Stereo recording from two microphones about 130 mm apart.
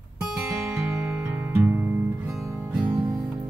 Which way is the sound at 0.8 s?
20° right (ahead or behind).